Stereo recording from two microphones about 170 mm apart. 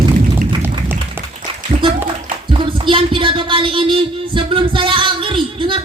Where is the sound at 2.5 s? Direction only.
30° right (ahead or behind).